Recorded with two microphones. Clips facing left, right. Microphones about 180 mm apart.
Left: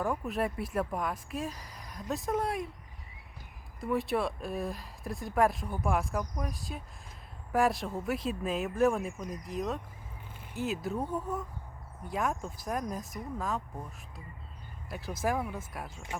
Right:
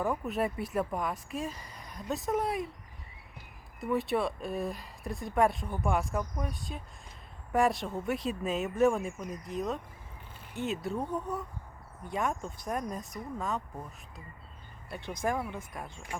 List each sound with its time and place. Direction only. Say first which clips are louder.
0.0 s speech: right 1 dB; centre (ahead or behind)
3.8 s speech: right 1 dB; centre (ahead or behind)
14.8 s speech: even; 5° left (ahead or behind)